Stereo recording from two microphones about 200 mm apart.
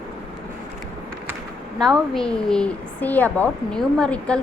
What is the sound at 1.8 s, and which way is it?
A woman's voice, centre (ahead or behind).